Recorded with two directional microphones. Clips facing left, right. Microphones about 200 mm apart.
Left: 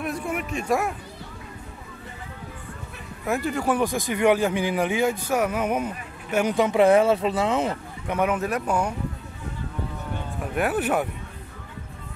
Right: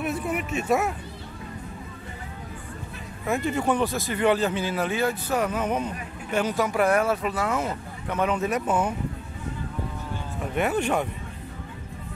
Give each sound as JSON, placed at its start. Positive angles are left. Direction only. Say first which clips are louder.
{"t": 0.0, "sound": "speech", "louder": "right 1 dB", "side_deg": -5}
{"t": 3.3, "sound": "speech", "louder": "even", "side_deg": 0}
{"t": 8.4, "sound": "speech", "louder": "even", "side_deg": 0}
{"t": 10.5, "sound": "speech", "louder": "left 1 dB", "side_deg": 5}